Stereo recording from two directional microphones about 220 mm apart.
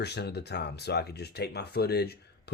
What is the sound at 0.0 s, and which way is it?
Speech, 50° left (ahead or behind).